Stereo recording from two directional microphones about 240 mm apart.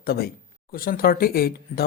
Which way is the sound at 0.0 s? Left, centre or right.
Left.